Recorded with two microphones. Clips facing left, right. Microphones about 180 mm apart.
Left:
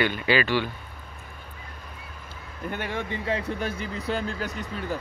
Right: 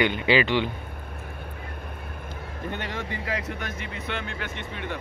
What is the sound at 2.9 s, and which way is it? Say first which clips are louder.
Speech: left 2 dB; 15° left (ahead or behind).